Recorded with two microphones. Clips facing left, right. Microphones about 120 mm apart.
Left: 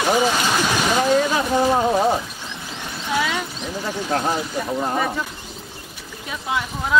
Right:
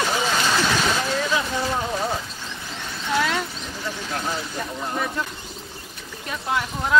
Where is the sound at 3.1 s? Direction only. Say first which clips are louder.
Even; 5° left (ahead or behind).